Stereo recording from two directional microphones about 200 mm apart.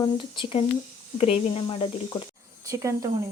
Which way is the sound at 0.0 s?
25° left (ahead or behind).